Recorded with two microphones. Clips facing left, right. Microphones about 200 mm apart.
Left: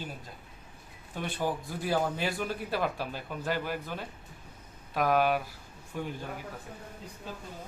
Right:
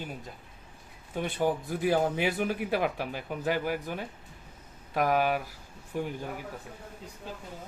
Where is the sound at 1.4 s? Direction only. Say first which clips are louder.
Right 5 dB; 15° right (ahead or behind).